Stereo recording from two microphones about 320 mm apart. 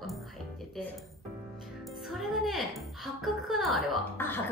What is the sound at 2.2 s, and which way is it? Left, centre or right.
A woman's voice, centre.